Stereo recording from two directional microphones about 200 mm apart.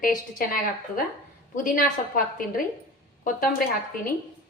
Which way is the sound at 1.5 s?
45° left (ahead or behind).